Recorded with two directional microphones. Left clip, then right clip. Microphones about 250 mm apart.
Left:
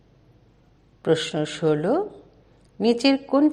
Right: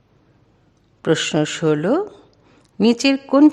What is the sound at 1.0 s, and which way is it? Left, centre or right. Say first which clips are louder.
A woman's voice: right 4 dB; right.